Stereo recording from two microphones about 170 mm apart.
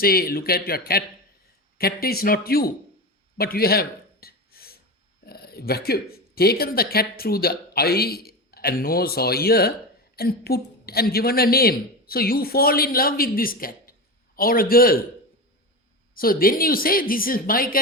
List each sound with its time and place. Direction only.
0.0 s a woman's voice: 60° left (ahead or behind)
3.3 s a sound: 65° left (ahead or behind)
5.2 s a woman's voice: 65° left (ahead or behind)
16.1 s a woman's voice: 60° left (ahead or behind)